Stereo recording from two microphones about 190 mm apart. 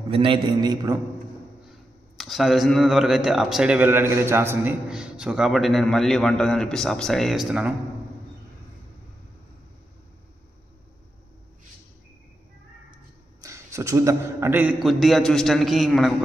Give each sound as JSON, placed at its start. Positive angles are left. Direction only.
{"t": 0.1, "sound": "a man's voice", "side_deg": -30}
{"t": 2.1, "sound": "speech", "side_deg": 0}
{"t": 13.4, "sound": "speech", "side_deg": -15}